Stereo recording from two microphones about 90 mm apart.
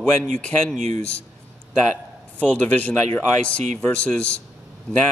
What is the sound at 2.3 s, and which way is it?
A man's voice, 15° left (ahead or behind).